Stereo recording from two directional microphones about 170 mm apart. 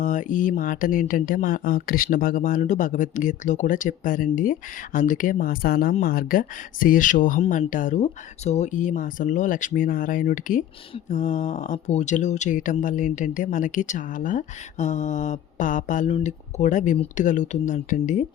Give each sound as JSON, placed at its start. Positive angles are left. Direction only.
{"t": 0.0, "sound": "speech", "side_deg": 50}
{"t": 16.0, "sound": "speech", "side_deg": 35}